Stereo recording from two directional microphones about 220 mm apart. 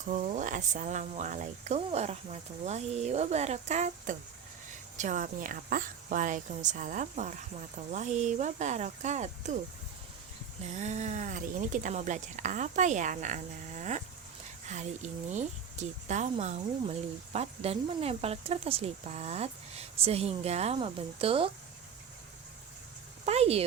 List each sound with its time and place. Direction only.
0.0 s speech: 35° right (ahead or behind)
10.7 s speech: 30° right (ahead or behind)
23.2 s speech: 30° right (ahead or behind)